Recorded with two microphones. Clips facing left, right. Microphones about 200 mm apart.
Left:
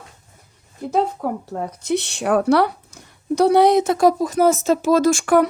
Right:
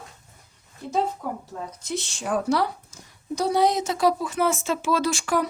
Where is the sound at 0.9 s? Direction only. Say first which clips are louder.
Left 5 dB; 60° left (ahead or behind).